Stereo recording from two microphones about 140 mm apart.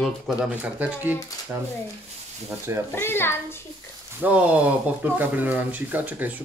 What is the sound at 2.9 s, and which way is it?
Speech, 15° left (ahead or behind).